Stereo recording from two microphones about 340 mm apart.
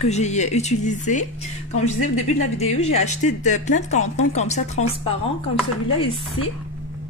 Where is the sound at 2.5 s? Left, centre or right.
Centre.